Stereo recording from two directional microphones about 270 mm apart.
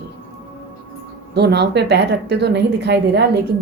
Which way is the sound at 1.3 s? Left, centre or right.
Right.